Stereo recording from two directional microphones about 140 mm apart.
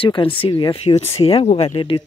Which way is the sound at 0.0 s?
40° left (ahead or behind).